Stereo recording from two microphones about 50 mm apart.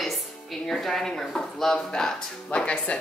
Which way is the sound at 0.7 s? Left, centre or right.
Centre.